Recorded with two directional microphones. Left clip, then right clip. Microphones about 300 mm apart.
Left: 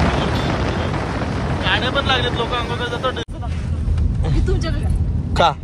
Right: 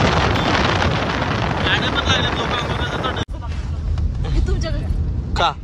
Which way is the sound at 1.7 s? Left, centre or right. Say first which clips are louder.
Left 2 dB; centre.